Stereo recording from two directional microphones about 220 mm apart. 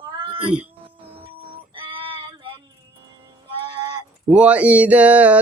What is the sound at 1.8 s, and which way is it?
Child singing, 20° right (ahead or behind).